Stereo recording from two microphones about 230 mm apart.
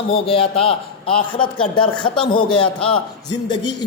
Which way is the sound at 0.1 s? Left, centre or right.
Left.